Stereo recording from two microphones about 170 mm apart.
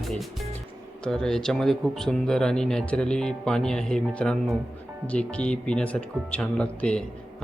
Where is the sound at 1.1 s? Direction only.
5° left (ahead or behind).